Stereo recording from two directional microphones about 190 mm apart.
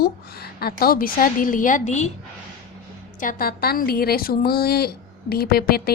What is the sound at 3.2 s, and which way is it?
A woman's voice, 45° left (ahead or behind).